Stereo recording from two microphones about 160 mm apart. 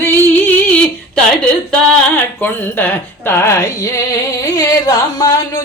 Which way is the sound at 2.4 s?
10° left (ahead or behind).